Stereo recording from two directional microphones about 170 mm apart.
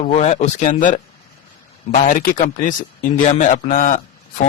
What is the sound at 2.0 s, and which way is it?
Speech, 55° left (ahead or behind).